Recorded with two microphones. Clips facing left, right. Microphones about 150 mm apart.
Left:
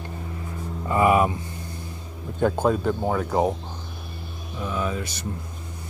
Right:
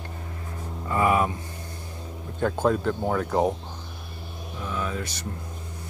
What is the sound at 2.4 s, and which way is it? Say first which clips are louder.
Speech: left 2 dB; 10° left (ahead or behind).